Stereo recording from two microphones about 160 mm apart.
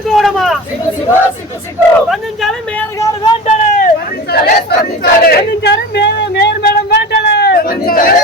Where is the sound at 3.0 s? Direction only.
25° left (ahead or behind).